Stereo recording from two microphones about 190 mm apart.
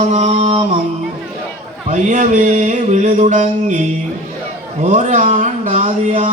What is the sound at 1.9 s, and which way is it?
Speech, 40° right (ahead or behind).